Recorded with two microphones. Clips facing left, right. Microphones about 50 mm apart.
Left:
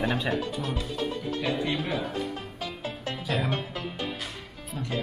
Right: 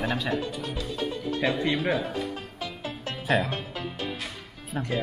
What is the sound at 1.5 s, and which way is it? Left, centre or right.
Speech, right.